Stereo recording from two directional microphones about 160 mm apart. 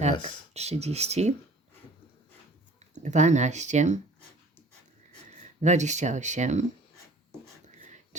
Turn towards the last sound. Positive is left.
turn(degrees=-50)  # may be behind; listen again after turning